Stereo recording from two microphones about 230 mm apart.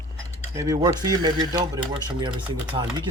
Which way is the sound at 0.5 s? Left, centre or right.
Centre.